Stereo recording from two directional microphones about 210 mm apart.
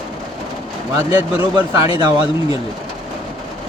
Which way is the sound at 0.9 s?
15° right (ahead or behind).